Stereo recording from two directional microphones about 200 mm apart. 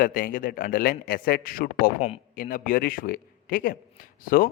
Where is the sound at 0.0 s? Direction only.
45° left (ahead or behind).